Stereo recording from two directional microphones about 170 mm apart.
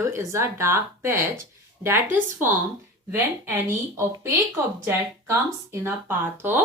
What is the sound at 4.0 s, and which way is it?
Speech, 15° right (ahead or behind).